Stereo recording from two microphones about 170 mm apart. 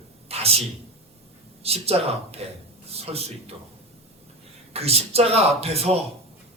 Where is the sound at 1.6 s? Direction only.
35° right (ahead or behind).